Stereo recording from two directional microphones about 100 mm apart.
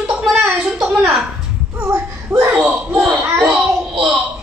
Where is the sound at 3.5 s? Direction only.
5° right (ahead or behind).